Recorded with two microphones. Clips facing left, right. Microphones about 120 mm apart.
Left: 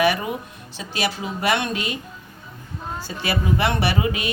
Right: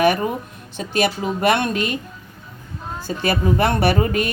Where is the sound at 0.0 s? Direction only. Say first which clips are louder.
Right 3 dB; 45° right (ahead or behind).